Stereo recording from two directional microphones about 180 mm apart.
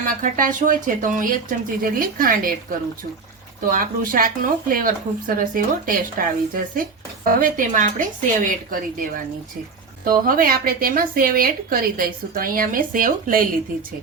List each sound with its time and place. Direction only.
0.0 s speech: 50° right (ahead or behind)